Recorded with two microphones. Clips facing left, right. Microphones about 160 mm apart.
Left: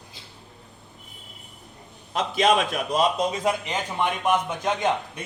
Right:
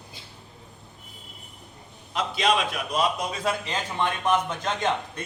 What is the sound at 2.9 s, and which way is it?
Speech, 20° left (ahead or behind).